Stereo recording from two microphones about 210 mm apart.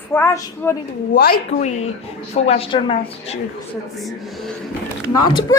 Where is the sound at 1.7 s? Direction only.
30° left (ahead or behind).